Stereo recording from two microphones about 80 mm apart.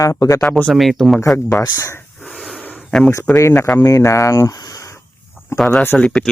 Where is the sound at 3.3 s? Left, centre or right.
Left.